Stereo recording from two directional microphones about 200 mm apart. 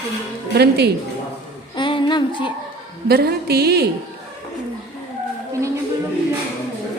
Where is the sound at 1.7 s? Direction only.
25° left (ahead or behind).